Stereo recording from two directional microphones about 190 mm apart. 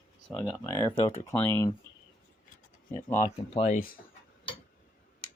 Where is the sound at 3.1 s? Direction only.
40° left (ahead or behind).